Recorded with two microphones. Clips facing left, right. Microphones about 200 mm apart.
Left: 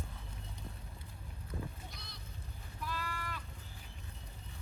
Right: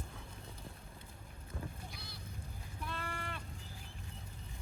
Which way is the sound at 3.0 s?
30° right (ahead or behind).